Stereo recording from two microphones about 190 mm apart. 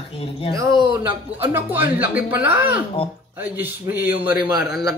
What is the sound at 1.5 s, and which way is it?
Speech, 10° right (ahead or behind).